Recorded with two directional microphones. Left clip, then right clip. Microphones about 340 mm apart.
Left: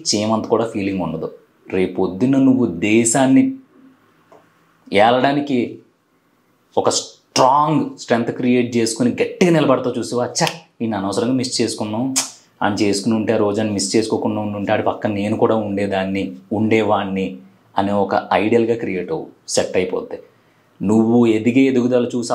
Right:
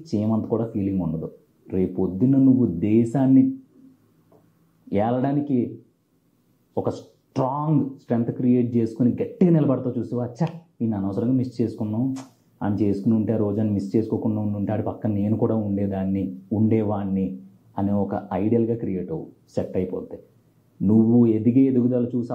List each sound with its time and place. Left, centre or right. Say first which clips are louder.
0.0 s speech: left 8 dB; centre
2.5 s speech: left 4 dB; centre
2.8 s speech: left 6 dB; centre
4.8 s speech: left 10 dB; centre
6.8 s speech: left 10 dB; centre
16.3 s speech: left 5 dB; left
16.6 s speech: left 8 dB; centre